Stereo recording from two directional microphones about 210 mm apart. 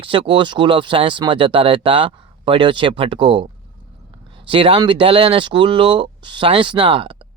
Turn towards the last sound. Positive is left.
turn(degrees=-25)  # may be behind; listen again after turning